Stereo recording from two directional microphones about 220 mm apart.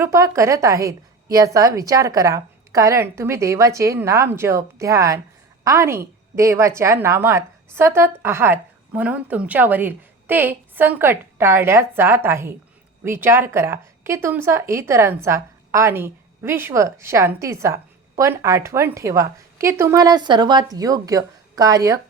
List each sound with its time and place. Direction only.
0.0 s a woman's voice: 15° right (ahead or behind)